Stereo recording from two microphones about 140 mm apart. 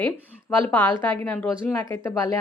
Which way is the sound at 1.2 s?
10° left (ahead or behind).